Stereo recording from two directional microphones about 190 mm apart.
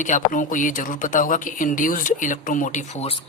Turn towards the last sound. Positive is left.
turn(degrees=35)  # may be behind; listen again after turning